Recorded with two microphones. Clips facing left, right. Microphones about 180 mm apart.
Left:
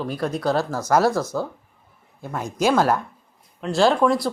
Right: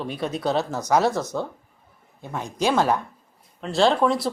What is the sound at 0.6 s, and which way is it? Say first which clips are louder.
Speech: left 1 dB; 20° right (ahead or behind).